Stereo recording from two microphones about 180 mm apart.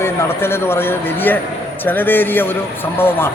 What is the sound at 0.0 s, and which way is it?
Speech, 15° left (ahead or behind).